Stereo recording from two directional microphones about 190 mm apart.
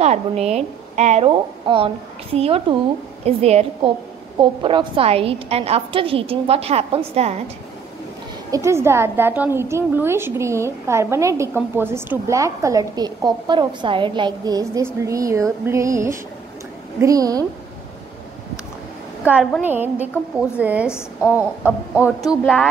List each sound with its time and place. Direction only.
0.0 s speech: 35° right (ahead or behind)
1.3 s a woman's voice: 25° right (ahead or behind)
8.5 s a woman's voice: 15° right (ahead or behind)
19.6 s a woman's voice: 10° right (ahead or behind)
20.9 s a woman's voice: 15° left (ahead or behind)
21.6 s a woman's voice: 10° right (ahead or behind)